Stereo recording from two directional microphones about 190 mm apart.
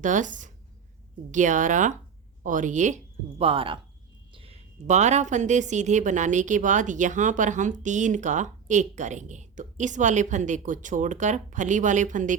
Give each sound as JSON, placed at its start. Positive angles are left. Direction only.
{"t": 0.0, "sound": "a woman's voice", "side_deg": -40}